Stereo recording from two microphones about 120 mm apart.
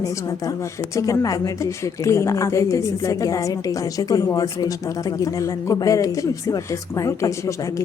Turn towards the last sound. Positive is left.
turn(degrees=25)  # may be behind; listen again after turning